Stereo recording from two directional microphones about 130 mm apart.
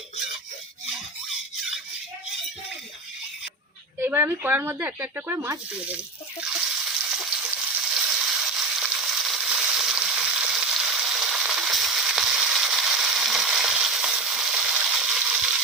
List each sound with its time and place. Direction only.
0.9 s squeak: 5° right (ahead or behind)
4.0 s speech: 15° right (ahead or behind)
6.4 s water: 5° right (ahead or behind)